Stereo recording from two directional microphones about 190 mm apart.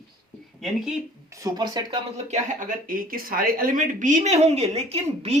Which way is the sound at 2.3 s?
45° right (ahead or behind).